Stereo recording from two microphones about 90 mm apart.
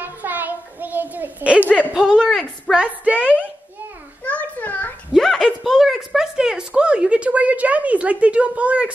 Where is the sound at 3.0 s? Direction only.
15° right (ahead or behind).